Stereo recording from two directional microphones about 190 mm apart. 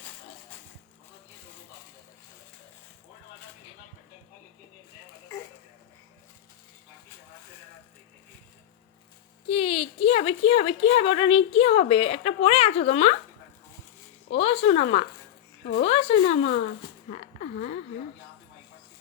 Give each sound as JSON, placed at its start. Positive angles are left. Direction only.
{"t": 9.5, "sound": "a woman's voice", "side_deg": 30}
{"t": 14.3, "sound": "speech", "side_deg": 35}
{"t": 17.1, "sound": "a sound", "side_deg": 35}